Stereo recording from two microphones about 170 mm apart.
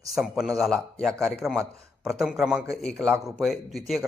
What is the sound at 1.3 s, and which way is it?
Speech, centre (ahead or behind).